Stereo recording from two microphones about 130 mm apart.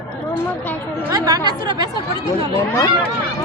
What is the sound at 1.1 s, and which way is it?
Speech, 30° right (ahead or behind).